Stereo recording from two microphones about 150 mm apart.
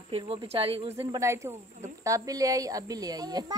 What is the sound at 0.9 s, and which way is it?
A child's voice, 20° right (ahead or behind).